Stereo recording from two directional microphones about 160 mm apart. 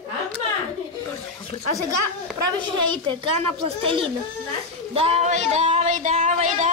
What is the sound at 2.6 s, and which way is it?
Speech, 30° right (ahead or behind).